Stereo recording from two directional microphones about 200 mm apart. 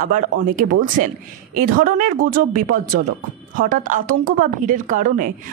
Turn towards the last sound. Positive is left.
turn(degrees=-40)  # may be behind; listen again after turning